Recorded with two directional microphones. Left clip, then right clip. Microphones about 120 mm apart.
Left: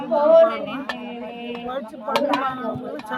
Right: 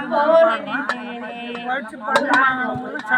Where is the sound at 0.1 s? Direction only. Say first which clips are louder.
Even; 15° left (ahead or behind).